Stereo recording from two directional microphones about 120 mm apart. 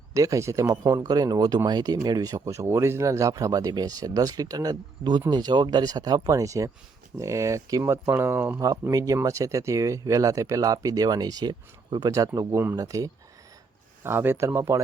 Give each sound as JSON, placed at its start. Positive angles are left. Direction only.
{"t": 0.1, "sound": "speech", "side_deg": -25}
{"t": 8.6, "sound": "speech", "side_deg": -30}
{"t": 14.0, "sound": "speech", "side_deg": -20}